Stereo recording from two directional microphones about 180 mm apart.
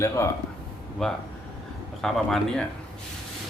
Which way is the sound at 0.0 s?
15° left (ahead or behind).